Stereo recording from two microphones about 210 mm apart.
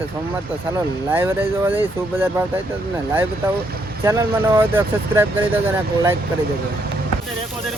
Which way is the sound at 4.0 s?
10° right (ahead or behind).